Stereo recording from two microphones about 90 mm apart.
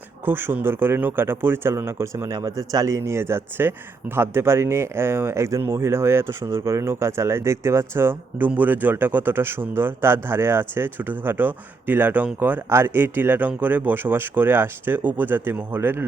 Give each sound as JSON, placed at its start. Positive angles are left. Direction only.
{"t": 0.3, "sound": "speech", "side_deg": -25}